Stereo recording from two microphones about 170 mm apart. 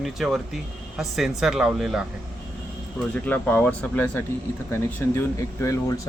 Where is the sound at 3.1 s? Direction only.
10° left (ahead or behind).